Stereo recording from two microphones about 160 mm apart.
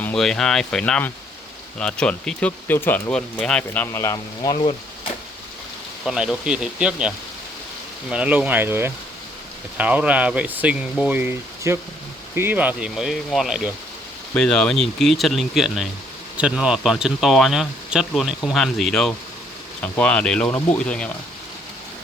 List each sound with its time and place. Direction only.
0.0 s speech: 5° left (ahead or behind)
3.9 s speech: 20° left (ahead or behind)
6.1 s speech: 5° right (ahead or behind)
8.1 s speech: 10° right (ahead or behind)